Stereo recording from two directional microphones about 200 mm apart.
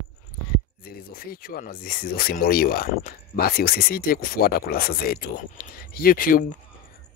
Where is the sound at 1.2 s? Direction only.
45° left (ahead or behind).